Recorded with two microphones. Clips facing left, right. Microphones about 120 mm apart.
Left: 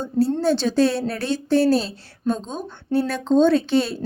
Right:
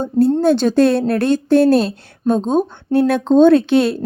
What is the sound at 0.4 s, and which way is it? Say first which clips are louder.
A woman's voice: right 6 dB; 50° right (ahead or behind).